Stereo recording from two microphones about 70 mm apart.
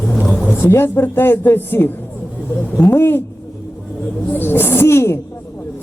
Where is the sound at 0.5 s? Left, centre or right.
Left.